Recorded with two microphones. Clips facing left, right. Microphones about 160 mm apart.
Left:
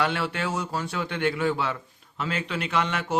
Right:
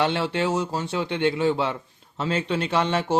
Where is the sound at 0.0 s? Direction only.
25° right (ahead or behind).